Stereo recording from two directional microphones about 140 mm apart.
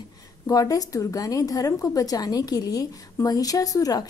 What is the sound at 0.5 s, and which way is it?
A woman's voice, 25° left (ahead or behind).